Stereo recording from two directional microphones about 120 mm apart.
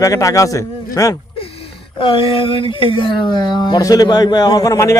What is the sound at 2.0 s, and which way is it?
Speech, 45° left (ahead or behind).